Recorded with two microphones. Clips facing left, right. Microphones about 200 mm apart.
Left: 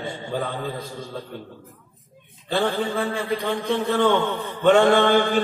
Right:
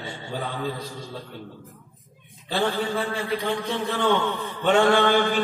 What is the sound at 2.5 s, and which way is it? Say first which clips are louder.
Music: left 2 dB; 50° left (ahead or behind).